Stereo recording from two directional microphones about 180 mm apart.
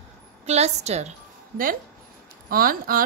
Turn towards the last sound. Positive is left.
turn(degrees=-50)  # may be behind; listen again after turning